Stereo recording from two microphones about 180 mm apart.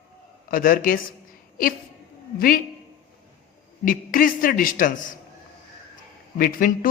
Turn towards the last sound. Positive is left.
turn(degrees=50)  # may be behind; listen again after turning